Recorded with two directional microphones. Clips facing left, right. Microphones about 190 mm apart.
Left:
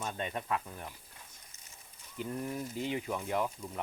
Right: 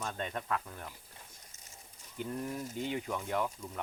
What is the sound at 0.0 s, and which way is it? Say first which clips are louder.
Speech: left 1 dB; 10° left (ahead or behind).